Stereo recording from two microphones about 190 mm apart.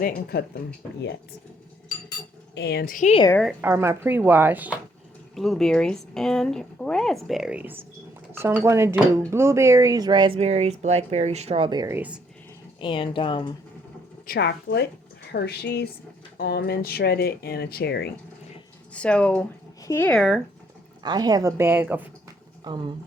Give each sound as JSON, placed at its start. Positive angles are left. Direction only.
{"t": 0.3, "sound": "speech", "side_deg": 55}
{"t": 2.6, "sound": "speech", "side_deg": 60}
{"t": 3.6, "sound": "speech", "side_deg": -15}
{"t": 12.8, "sound": "a woman's voice", "side_deg": 25}
{"t": 14.3, "sound": "speech", "side_deg": 60}
{"t": 18.9, "sound": "speech", "side_deg": 5}
{"t": 21.0, "sound": "speech", "side_deg": -20}
{"t": 22.6, "sound": "speech", "side_deg": -25}